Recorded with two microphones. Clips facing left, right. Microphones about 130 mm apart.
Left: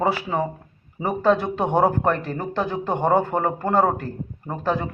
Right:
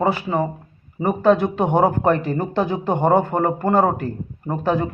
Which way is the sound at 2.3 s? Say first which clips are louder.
Right 4 dB; 10° right (ahead or behind).